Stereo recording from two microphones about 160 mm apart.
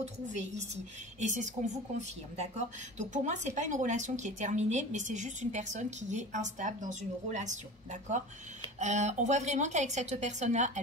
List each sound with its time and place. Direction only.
0.0 s a woman's voice: 45° right (ahead or behind)